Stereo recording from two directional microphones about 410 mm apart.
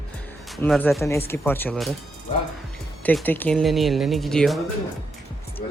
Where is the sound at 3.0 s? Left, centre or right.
Centre.